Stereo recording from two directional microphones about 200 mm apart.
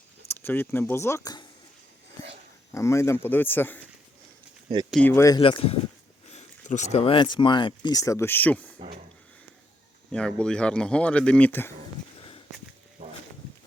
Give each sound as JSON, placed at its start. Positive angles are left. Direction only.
{"t": 0.3, "sound": "speech", "side_deg": 10}
{"t": 2.7, "sound": "speech", "side_deg": 15}
{"t": 4.9, "sound": "speech", "side_deg": 5}
{"t": 5.4, "sound": "speech", "side_deg": 25}
{"t": 10.1, "sound": "speech", "side_deg": 5}
{"t": 13.0, "sound": "a sound", "side_deg": -35}